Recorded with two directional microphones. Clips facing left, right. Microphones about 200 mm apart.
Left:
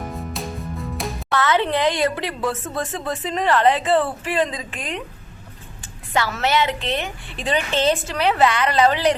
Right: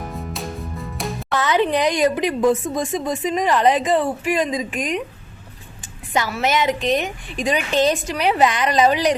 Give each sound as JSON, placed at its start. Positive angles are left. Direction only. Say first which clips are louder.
{"t": 0.0, "sound": "music", "louder": "even", "side_deg": 0}
{"t": 1.3, "sound": "a woman's voice", "louder": "right 1 dB", "side_deg": -15}
{"t": 6.1, "sound": "a woman's voice", "louder": "even", "side_deg": -15}